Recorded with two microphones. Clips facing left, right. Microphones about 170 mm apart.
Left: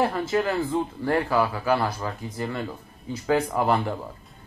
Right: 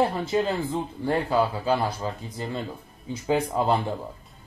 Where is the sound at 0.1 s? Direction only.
20° right (ahead or behind).